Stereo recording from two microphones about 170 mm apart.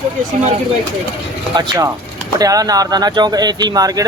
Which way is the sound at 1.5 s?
25° right (ahead or behind).